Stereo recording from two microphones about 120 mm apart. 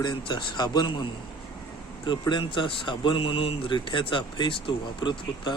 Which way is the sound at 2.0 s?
40° left (ahead or behind).